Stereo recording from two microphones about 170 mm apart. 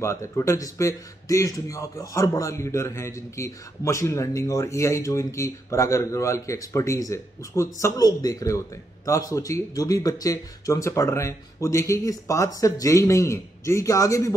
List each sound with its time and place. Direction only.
0.0 s speech: 15° left (ahead or behind)